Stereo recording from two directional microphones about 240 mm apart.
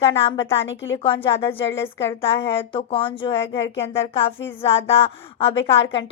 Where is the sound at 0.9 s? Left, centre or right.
Left.